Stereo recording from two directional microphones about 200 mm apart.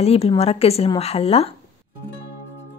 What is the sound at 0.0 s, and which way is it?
A woman's voice, 30° left (ahead or behind).